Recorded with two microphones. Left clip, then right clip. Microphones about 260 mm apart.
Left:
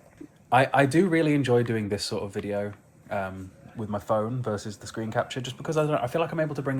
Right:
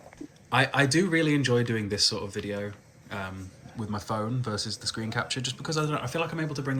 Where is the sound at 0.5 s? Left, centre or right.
Centre.